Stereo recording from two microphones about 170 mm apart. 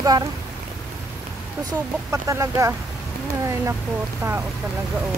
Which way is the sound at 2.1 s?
20° right (ahead or behind).